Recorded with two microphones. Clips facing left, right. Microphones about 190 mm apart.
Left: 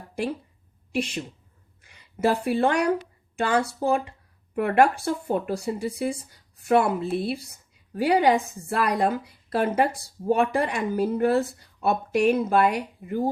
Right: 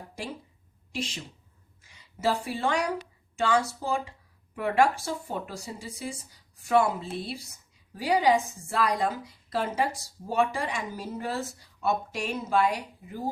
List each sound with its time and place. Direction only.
0.9 s a woman's voice: 60° left (ahead or behind)